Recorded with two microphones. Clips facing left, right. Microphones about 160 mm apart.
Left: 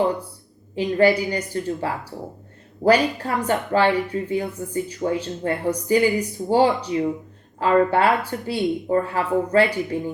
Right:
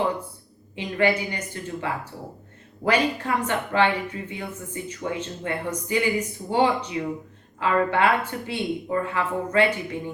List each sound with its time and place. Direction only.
0.8 s speech: 35° left (ahead or behind)